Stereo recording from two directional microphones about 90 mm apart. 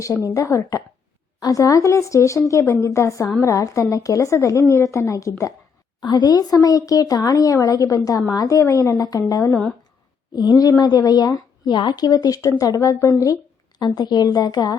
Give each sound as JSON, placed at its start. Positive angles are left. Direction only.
{"t": 0.0, "sound": "speech", "side_deg": 35}
{"t": 6.0, "sound": "a woman's voice", "side_deg": 55}
{"t": 13.7, "sound": "a woman's voice", "side_deg": 50}